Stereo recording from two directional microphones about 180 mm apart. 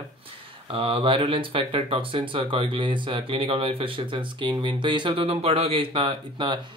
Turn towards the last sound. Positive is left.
turn(degrees=-25)  # may be behind; listen again after turning